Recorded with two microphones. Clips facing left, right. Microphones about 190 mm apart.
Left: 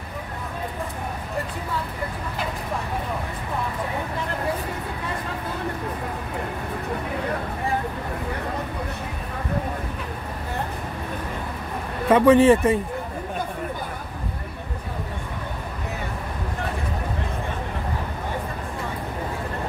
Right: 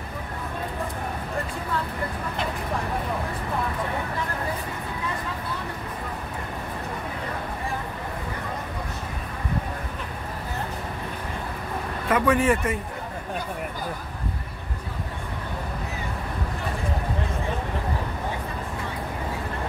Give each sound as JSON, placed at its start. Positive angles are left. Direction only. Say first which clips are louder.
{"t": 12.1, "sound": "speech", "louder": "left 7 dB", "side_deg": 25}